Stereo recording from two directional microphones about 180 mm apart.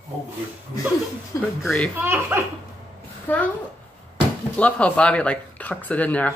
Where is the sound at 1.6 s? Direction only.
5° left (ahead or behind).